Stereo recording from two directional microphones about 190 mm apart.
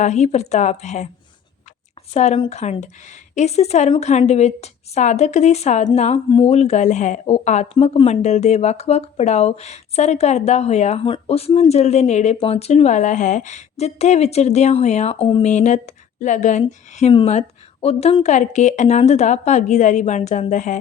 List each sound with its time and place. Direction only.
0.0 s speech: 35° left (ahead or behind)
2.1 s speech: 35° left (ahead or behind)